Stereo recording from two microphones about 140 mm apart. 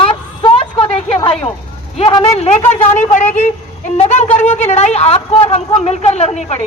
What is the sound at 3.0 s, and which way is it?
A woman's voice, 60° left (ahead or behind).